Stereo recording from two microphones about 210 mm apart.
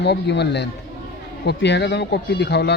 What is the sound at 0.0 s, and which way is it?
Speech, 55° left (ahead or behind).